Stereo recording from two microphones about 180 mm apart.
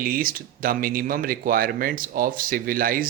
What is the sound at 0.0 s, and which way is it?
Speech, 50° right (ahead or behind).